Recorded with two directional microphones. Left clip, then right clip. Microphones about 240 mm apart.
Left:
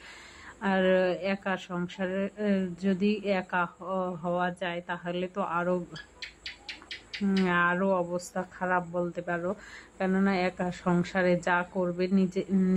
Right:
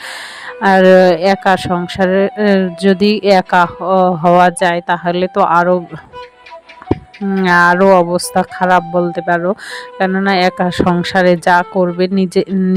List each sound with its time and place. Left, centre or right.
0.6 s speech: right
7.3 s speech: right